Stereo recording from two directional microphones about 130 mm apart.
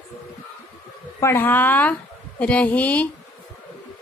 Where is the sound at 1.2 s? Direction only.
15° left (ahead or behind).